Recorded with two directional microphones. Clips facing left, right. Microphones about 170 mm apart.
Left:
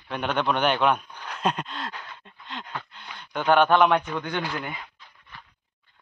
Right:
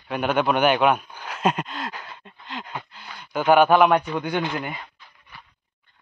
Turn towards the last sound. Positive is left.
turn(degrees=-15)  # may be behind; listen again after turning